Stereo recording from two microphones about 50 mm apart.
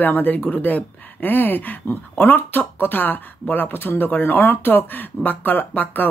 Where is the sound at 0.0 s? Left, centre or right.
Left.